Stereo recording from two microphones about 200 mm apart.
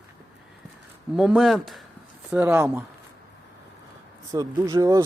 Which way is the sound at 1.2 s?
5° right (ahead or behind).